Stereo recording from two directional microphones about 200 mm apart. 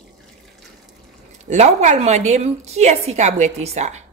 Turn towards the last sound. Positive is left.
turn(degrees=-35)  # may be behind; listen again after turning